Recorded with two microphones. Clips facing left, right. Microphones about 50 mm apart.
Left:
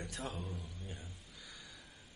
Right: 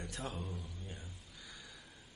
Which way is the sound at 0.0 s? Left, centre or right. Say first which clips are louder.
Even; centre.